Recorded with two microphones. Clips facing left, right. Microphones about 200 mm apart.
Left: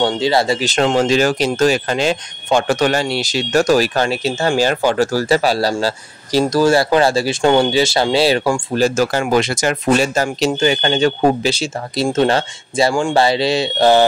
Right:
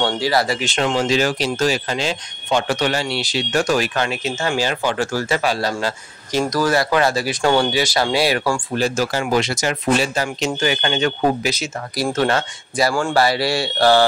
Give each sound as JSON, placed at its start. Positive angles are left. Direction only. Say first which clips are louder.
{"t": 0.0, "sound": "speech", "louder": "left 3 dB", "side_deg": 25}
{"t": 0.7, "sound": "speech", "louder": "left 4 dB", "side_deg": 45}
{"t": 8.7, "sound": "speech", "louder": "left 6 dB", "side_deg": 45}
{"t": 10.6, "sound": "speech", "louder": "left 4 dB", "side_deg": 30}